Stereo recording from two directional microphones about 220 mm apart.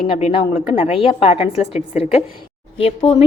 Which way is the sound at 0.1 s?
25° left (ahead or behind).